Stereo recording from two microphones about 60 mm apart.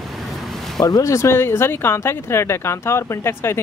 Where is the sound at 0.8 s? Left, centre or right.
Left.